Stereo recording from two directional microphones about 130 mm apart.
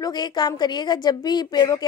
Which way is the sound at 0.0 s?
35° left (ahead or behind).